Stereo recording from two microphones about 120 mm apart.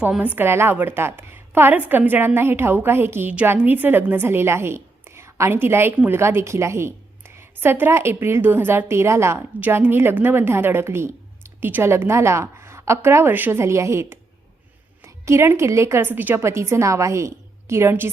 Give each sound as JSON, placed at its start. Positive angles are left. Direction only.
{"t": 0.0, "sound": "a woman's voice", "side_deg": -10}